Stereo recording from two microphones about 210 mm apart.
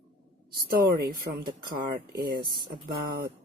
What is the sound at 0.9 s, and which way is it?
Speech, 45° right (ahead or behind).